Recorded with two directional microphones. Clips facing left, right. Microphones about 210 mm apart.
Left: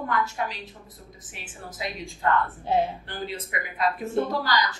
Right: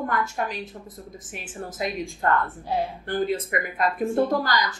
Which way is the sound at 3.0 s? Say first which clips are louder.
Right 9 dB; 50° right (ahead or behind).